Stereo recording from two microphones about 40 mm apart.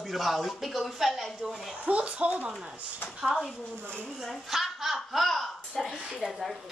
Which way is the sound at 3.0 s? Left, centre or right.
Left.